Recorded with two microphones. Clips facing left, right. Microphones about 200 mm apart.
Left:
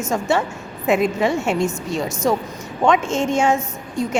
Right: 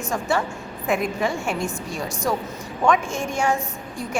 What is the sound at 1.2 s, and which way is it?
Speech, 25° left (ahead or behind).